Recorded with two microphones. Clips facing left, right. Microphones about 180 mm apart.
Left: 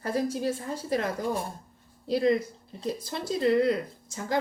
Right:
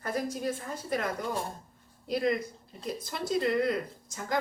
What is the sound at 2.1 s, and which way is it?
Speech, 30° left (ahead or behind).